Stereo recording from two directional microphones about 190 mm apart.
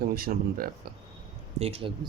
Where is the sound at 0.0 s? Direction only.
50° right (ahead or behind).